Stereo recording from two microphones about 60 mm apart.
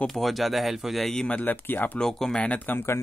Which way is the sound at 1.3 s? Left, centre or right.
Left.